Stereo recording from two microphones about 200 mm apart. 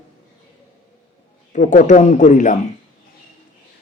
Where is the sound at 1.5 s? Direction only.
40° left (ahead or behind).